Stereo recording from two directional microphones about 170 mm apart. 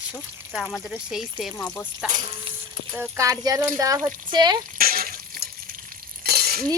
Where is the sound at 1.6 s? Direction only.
10° left (ahead or behind).